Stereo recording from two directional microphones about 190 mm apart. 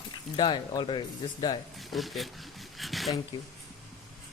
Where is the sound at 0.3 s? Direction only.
25° left (ahead or behind).